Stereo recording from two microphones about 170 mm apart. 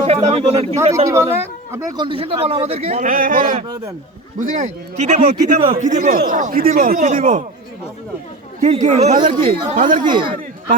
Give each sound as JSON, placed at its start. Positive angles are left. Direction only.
{"t": 0.0, "sound": "speech", "side_deg": -40}
{"t": 0.8, "sound": "a man's voice", "side_deg": -15}
{"t": 2.0, "sound": "speech", "side_deg": -30}
{"t": 3.0, "sound": "a man's voice", "side_deg": -55}
{"t": 8.6, "sound": "a man's voice", "side_deg": -40}